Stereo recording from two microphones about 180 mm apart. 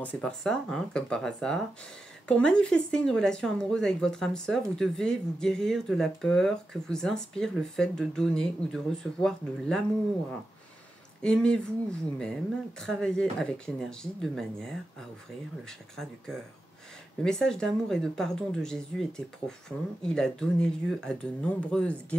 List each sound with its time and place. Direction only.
0.0 s speech: 5° left (ahead or behind)
11.2 s speech: 5° left (ahead or behind)